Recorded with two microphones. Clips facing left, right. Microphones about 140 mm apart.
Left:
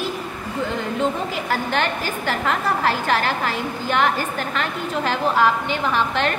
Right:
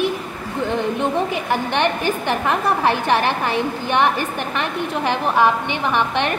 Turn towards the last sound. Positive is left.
turn(degrees=-20)  # may be behind; listen again after turning